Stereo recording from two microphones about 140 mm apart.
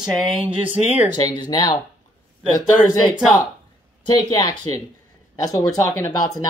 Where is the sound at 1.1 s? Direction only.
30° left (ahead or behind).